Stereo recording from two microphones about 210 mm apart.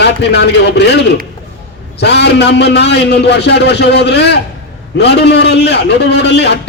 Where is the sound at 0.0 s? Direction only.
55° left (ahead or behind).